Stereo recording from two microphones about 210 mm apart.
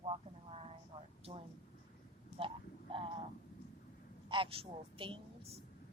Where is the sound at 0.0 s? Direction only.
25° right (ahead or behind).